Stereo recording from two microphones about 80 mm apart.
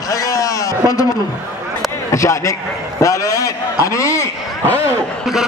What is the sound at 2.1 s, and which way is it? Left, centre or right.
A man's voice, left.